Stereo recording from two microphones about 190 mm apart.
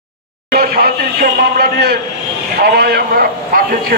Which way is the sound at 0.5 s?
50° right (ahead or behind).